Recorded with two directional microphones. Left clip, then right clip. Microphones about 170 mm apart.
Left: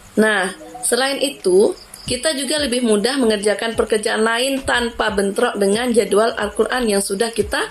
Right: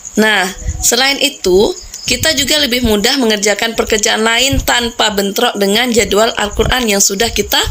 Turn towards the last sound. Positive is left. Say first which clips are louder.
# right 6 dB
turn(degrees=-60)  # may be behind; listen again after turning